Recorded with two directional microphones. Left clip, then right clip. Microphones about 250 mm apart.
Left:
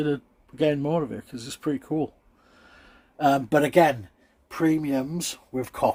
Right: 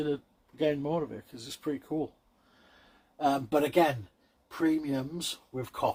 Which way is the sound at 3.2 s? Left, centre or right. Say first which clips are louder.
Left 6 dB; left.